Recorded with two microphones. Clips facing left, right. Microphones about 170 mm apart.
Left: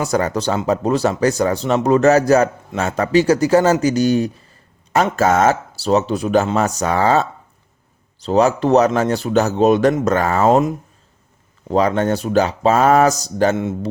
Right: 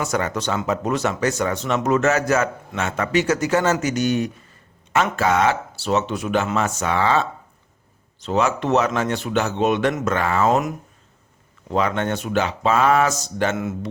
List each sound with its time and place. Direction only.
0.0 s speech: 35° left (ahead or behind)